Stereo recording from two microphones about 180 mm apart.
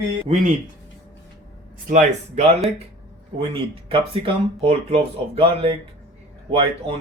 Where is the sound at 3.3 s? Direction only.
30° right (ahead or behind).